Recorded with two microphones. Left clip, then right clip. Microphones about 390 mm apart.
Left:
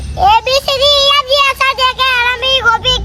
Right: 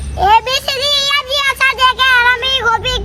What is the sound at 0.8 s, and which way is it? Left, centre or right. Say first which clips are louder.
Child singing: left 6 dB; left.